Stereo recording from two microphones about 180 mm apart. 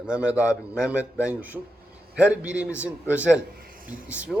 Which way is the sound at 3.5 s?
55° right (ahead or behind).